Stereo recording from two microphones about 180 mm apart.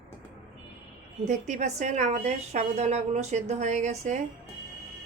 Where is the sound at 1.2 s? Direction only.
40° right (ahead or behind).